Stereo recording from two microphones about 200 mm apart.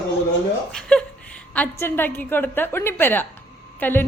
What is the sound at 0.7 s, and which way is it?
Chuckle, 5° left (ahead or behind).